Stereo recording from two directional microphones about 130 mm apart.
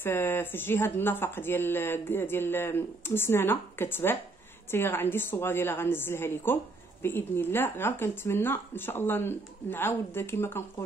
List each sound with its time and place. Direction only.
0.0 s a woman's voice: 15° left (ahead or behind)